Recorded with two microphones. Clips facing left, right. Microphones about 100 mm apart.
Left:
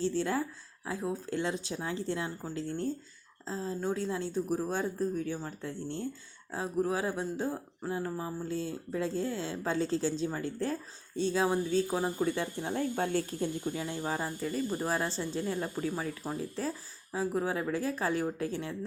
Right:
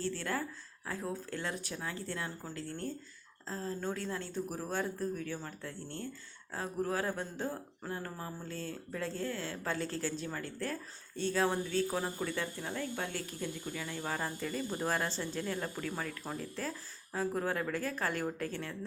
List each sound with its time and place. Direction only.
0.0 s speech: 20° left (ahead or behind)